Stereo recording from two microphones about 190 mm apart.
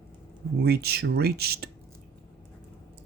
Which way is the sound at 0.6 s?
55° right (ahead or behind).